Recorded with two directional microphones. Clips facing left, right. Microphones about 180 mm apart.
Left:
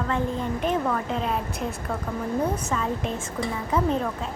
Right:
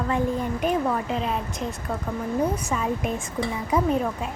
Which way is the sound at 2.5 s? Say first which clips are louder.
Right 1 dB; 10° right (ahead or behind).